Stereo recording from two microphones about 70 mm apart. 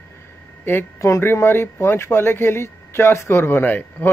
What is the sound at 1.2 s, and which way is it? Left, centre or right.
Speech, left.